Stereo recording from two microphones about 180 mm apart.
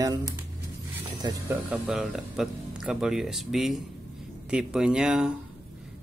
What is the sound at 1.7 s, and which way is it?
Speech, centre (ahead or behind).